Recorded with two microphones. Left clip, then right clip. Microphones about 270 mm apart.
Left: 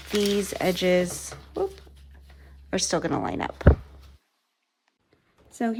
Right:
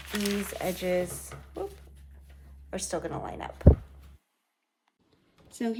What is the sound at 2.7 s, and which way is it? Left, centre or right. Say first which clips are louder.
Speech: left 8 dB; left.